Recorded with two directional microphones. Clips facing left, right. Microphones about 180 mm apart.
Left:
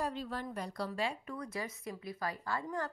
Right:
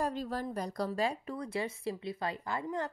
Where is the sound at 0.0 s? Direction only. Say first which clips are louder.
Right 4 dB; 45° right (ahead or behind).